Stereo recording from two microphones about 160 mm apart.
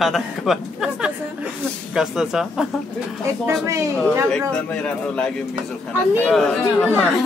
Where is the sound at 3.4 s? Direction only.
20° right (ahead or behind).